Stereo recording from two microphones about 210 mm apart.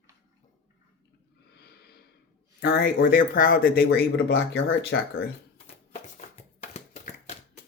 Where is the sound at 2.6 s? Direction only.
50° left (ahead or behind).